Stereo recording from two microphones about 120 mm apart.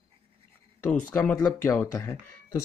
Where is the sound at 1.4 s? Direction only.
15° left (ahead or behind).